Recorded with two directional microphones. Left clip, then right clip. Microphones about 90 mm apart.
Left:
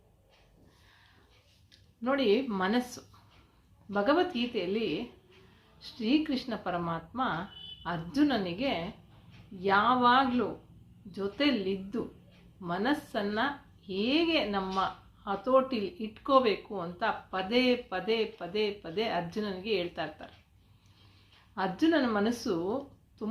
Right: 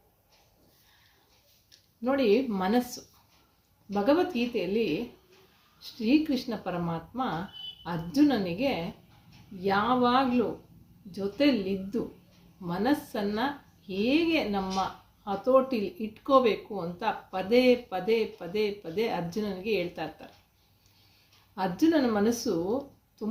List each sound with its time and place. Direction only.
2.0 s speech: 30° right (ahead or behind)
21.5 s speech: 30° right (ahead or behind)